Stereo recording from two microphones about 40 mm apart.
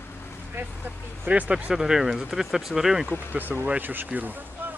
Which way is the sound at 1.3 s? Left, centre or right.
Right.